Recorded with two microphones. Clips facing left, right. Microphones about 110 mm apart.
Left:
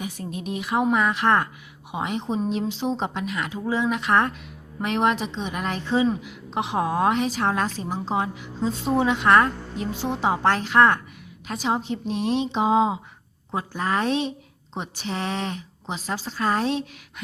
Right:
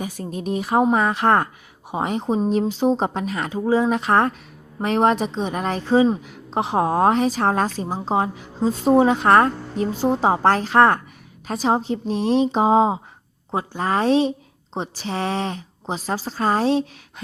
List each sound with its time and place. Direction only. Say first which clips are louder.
0.0 s a woman's voice: right 4 dB; 35° right (ahead or behind)